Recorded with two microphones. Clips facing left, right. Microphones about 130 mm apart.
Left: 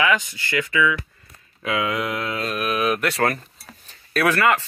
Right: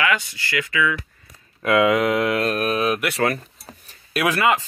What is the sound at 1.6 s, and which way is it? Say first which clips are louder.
Speech: right 7 dB; 75° right (ahead or behind).